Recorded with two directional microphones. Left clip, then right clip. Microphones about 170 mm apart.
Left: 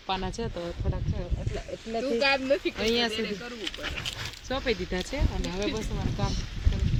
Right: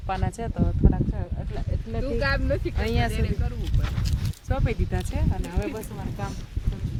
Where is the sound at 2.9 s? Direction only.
40° right (ahead or behind).